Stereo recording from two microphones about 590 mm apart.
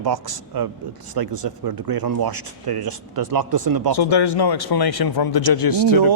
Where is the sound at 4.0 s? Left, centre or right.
Left.